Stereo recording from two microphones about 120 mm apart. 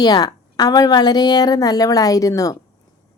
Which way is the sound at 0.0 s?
35° left (ahead or behind).